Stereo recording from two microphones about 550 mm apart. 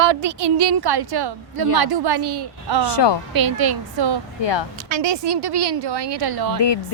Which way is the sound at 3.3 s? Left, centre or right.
Right.